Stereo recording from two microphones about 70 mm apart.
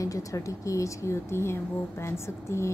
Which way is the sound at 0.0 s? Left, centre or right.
Left.